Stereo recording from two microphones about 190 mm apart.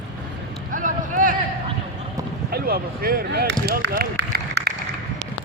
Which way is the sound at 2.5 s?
50° right (ahead or behind).